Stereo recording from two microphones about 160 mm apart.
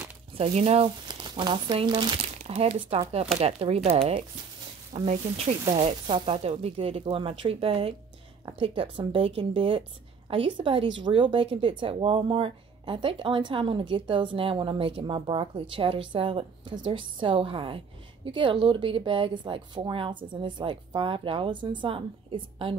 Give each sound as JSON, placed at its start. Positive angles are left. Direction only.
{"t": 0.4, "sound": "speech", "side_deg": -40}
{"t": 1.2, "sound": "speech", "side_deg": -30}